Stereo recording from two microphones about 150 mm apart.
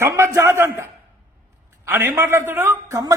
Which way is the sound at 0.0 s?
20° right (ahead or behind).